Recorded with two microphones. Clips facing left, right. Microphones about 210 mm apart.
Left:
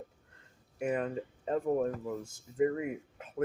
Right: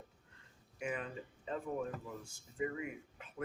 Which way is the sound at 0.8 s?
45° left (ahead or behind).